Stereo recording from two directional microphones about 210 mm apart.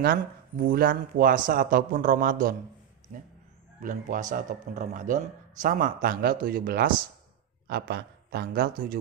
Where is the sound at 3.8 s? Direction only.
40° right (ahead or behind).